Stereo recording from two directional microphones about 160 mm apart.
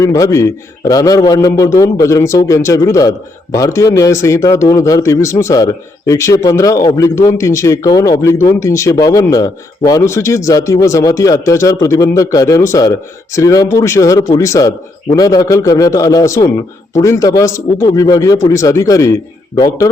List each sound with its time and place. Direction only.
0.0 s a man's voice: 20° left (ahead or behind)